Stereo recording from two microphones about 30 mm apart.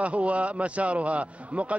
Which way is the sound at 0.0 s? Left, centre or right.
Right.